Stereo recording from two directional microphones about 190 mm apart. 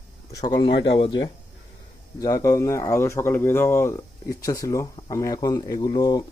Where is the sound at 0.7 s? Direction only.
65° left (ahead or behind).